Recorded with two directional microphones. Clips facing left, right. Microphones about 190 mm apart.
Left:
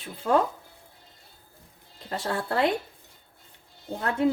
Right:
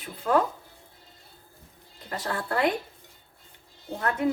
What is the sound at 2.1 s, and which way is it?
Speech, 30° left (ahead or behind).